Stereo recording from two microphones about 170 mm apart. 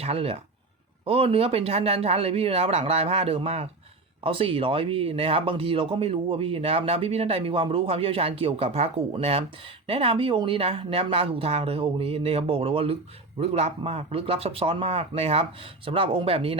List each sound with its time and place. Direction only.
0.0 s speech: 35° right (ahead or behind)